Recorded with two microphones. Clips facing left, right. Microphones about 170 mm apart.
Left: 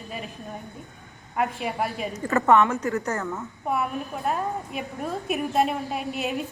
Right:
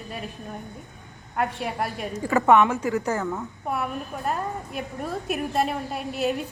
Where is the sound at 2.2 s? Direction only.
10° right (ahead or behind).